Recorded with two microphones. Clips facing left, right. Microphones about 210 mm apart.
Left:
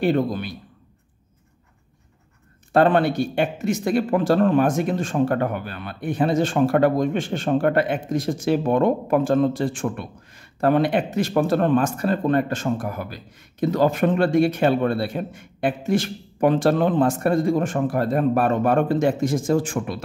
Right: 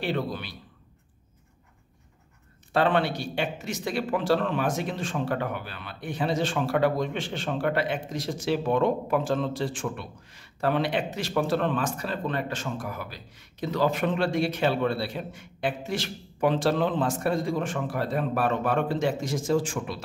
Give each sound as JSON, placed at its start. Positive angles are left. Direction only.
{"t": 0.0, "sound": "speech", "side_deg": 45}
{"t": 2.7, "sound": "speech", "side_deg": 50}